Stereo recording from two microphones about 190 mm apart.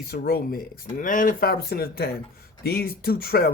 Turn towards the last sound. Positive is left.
turn(degrees=50)  # may be behind; listen again after turning